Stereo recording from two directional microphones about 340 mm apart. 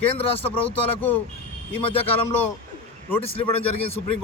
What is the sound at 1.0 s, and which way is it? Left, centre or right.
Speech, centre.